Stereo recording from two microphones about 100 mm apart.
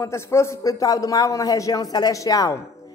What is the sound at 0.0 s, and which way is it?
A woman's voice, 25° left (ahead or behind).